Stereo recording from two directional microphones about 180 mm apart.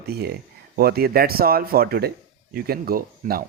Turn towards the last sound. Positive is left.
turn(degrees=-55)  # may be behind; listen again after turning